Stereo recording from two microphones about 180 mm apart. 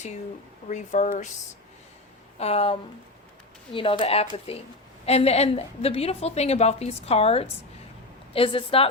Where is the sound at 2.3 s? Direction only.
35° left (ahead or behind).